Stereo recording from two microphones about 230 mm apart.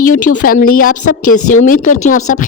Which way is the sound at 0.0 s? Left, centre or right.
Left.